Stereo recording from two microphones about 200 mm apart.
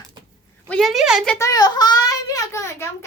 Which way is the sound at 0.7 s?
Centre (ahead or behind).